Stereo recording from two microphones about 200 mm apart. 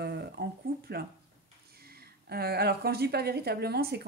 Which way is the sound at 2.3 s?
50° right (ahead or behind).